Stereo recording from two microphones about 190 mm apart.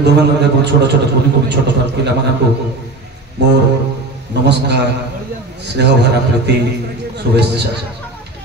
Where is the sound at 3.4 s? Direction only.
65° right (ahead or behind).